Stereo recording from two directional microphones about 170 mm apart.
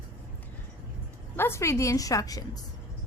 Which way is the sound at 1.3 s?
15° left (ahead or behind).